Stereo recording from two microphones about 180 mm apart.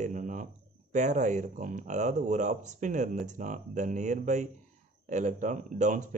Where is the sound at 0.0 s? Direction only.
45° right (ahead or behind).